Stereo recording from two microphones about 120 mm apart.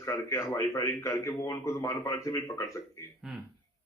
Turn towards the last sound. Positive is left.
turn(degrees=-5)  # may be behind; listen again after turning